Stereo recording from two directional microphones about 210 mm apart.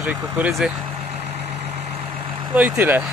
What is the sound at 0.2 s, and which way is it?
Speech, 5° right (ahead or behind).